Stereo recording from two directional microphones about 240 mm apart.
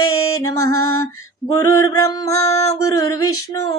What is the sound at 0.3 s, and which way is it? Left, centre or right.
Female singing, centre.